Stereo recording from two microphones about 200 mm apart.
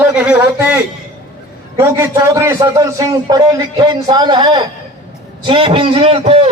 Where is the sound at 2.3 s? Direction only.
15° right (ahead or behind); by 6.5 s 30° right (ahead or behind).